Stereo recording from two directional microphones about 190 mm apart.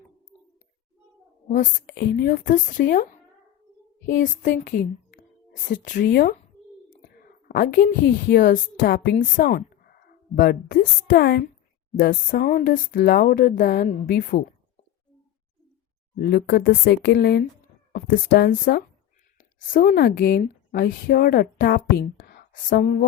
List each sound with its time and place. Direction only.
1.5 s a woman's voice: 50° left (ahead or behind)
16.1 s a woman's voice: 55° left (ahead or behind)